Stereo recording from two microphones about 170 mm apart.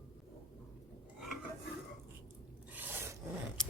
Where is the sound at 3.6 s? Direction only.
5° left (ahead or behind).